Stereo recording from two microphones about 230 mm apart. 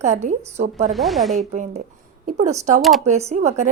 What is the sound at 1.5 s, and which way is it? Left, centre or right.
Speech, right.